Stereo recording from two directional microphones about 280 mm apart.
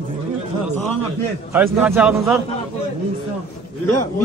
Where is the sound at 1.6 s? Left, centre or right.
Centre.